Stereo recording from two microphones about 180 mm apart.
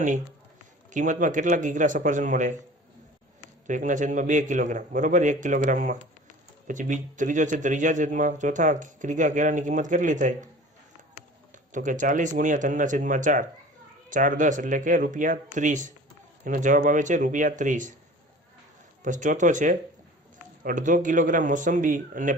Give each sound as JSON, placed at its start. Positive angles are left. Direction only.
{"t": 0.9, "sound": "a man's voice", "side_deg": -45}
{"t": 3.7, "sound": "a man's voice", "side_deg": -45}
{"t": 11.5, "sound": "a man's voice", "side_deg": -45}
{"t": 19.0, "sound": "a man's voice", "side_deg": -45}